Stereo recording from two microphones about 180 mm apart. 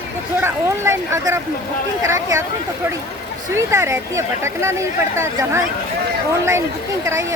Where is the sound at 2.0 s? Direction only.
15° right (ahead or behind).